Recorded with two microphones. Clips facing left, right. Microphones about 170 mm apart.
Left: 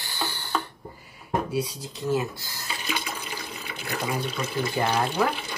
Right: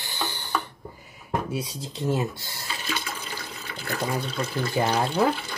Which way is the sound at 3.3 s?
15° left (ahead or behind).